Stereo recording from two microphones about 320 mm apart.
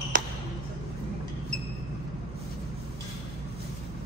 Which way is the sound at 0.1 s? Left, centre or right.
Right.